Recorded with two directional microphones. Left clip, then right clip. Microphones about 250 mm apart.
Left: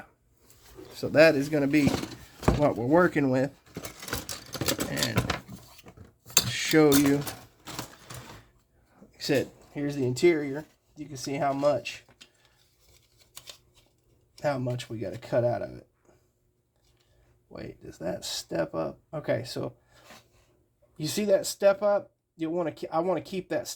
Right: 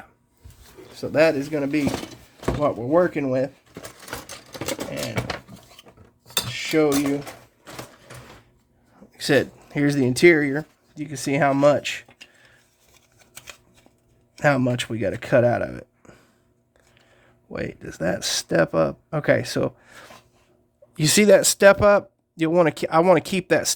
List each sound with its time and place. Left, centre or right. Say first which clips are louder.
0.9 s speech: right 1 dB; centre
3.8 s a sound: right 1 dB; centre
4.5 s a sound: right 1 dB; centre
6.5 s speech: right 1 dB; centre
9.0 s a sound: right 7 dB; centre
9.7 s speech: right 9 dB; right
11.1 s speech: right 8 dB; right
14.3 s speech: right 9 dB; right
17.5 s speech: right 11 dB; right